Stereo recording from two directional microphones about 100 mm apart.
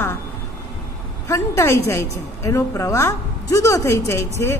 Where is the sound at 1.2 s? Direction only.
25° left (ahead or behind).